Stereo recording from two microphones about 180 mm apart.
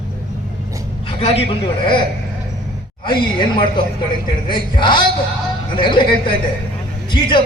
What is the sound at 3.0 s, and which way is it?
A man's voice, 25° left (ahead or behind).